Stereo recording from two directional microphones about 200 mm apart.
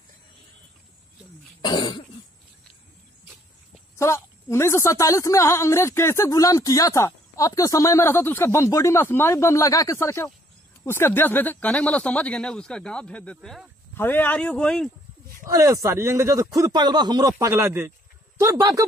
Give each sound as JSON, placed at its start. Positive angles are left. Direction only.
{"t": 1.6, "sound": "cough", "side_deg": 20}
{"t": 4.0, "sound": "speech", "side_deg": 15}
{"t": 15.4, "sound": "speech", "side_deg": -15}